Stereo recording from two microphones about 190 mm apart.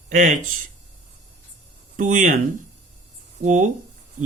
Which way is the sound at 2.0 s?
45° right (ahead or behind).